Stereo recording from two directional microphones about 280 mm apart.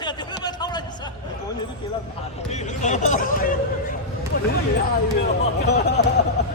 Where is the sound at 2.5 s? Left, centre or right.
Left.